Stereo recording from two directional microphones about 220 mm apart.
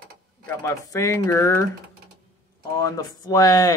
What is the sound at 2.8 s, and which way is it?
Speech, 15° left (ahead or behind).